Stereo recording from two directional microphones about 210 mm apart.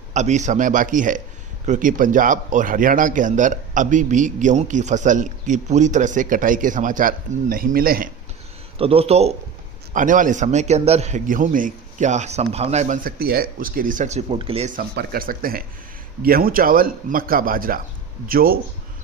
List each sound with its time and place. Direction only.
0.1 s a man's voice: 35° right (ahead or behind)
8.8 s a man's voice: 30° right (ahead or behind)
14.8 s speech: 45° right (ahead or behind)